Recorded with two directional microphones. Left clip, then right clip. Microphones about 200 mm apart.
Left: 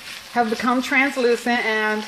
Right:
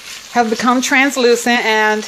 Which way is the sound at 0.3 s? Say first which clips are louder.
Right 6 dB; 40° right (ahead or behind).